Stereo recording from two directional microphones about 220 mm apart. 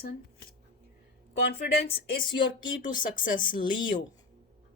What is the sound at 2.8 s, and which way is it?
Speech, 35° left (ahead or behind).